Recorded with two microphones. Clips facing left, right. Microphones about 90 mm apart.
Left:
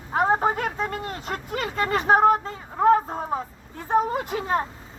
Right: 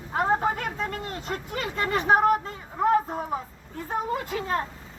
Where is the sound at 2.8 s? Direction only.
30° left (ahead or behind).